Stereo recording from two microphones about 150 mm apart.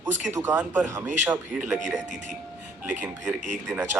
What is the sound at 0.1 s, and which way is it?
Speech, 55° right (ahead or behind).